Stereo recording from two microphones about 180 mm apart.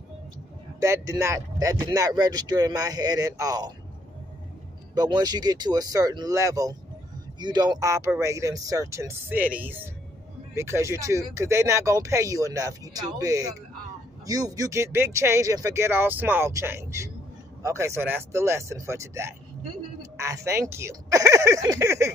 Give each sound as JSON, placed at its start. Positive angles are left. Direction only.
{"t": 0.7, "sound": "speech", "side_deg": -15}
{"t": 4.9, "sound": "speech", "side_deg": -20}